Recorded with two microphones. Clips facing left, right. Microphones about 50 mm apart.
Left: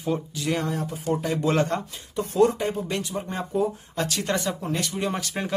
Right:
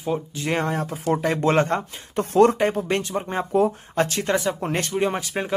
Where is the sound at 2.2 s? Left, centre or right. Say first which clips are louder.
Right 4 dB; right.